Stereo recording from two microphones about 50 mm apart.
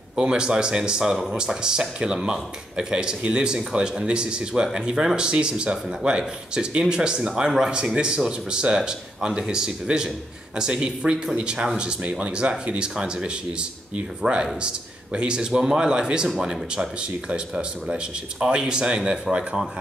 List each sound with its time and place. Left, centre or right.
0.1 s speech: centre